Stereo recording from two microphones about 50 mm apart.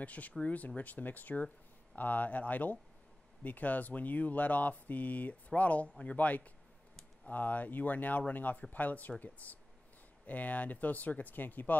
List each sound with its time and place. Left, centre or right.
0.0 s speech: left